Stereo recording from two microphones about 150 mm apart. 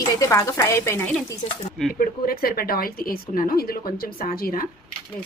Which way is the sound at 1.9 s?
80° left.